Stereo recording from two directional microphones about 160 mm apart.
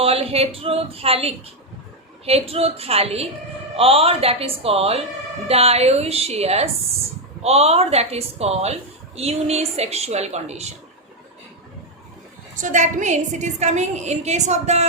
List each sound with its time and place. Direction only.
0.0 s a woman's voice: 40° right (ahead or behind)
12.5 s a woman's voice: 50° right (ahead or behind)